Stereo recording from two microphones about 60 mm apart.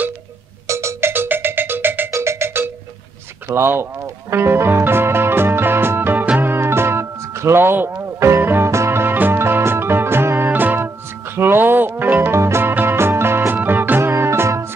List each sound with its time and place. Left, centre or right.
0.7 s music: right
1.1 s music: right
2.0 s music: right
8.0 s music: right